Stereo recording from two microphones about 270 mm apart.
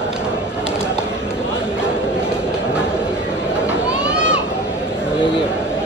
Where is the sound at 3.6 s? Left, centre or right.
Centre.